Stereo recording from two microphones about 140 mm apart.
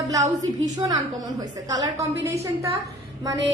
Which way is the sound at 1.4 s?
25° right (ahead or behind).